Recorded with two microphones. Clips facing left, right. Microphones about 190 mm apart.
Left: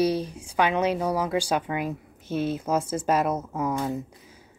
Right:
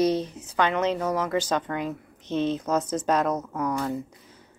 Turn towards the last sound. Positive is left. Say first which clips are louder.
# even
turn(degrees=20)  # may be behind; listen again after turning